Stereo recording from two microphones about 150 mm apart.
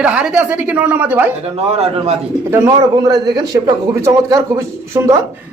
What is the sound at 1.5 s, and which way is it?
Speech, 45° right (ahead or behind).